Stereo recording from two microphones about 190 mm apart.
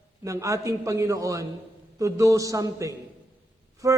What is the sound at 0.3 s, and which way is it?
A man's voice, 15° right (ahead or behind).